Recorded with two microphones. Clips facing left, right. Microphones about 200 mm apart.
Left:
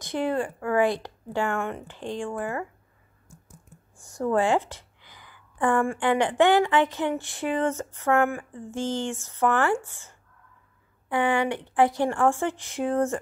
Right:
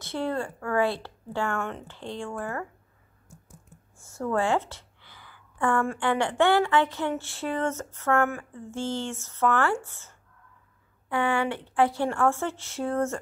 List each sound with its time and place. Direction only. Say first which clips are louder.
0.0 s speech: left 3 dB; 15° left (ahead or behind)
4.0 s speech: left 3 dB; 15° left (ahead or behind)